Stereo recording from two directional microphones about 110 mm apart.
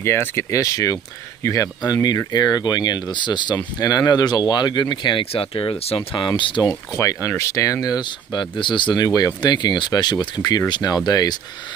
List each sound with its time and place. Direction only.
0.0 s speech: 20° left (ahead or behind); by 6.7 s 45° left (ahead or behind)
6.7 s speech: 30° left (ahead or behind); by 9.0 s 45° left (ahead or behind)
9.0 s speech: 35° left (ahead or behind)